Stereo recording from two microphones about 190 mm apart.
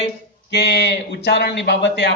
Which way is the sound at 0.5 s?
65° left (ahead or behind).